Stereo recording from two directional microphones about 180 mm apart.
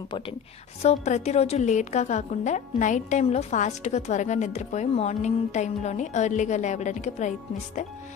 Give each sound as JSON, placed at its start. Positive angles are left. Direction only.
{"t": 0.8, "sound": "a woman's voice", "side_deg": 40}